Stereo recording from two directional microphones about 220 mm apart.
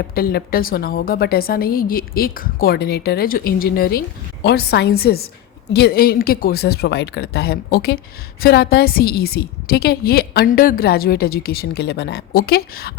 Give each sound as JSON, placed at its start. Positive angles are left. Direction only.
{"t": 0.0, "sound": "speech", "side_deg": 45}